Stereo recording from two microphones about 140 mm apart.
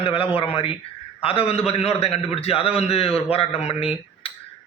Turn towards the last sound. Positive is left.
turn(degrees=45)  # may be behind; listen again after turning